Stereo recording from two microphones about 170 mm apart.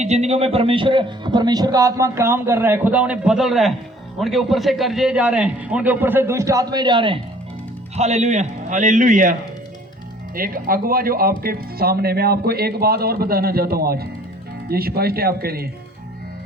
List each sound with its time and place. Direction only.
0.0 s a man's voice: 40° right (ahead or behind)
7.9 s a man's voice: 40° right (ahead or behind)
10.3 s speech: 55° right (ahead or behind)